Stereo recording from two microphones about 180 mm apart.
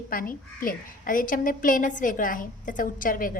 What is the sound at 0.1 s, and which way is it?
A woman's voice, 50° left (ahead or behind).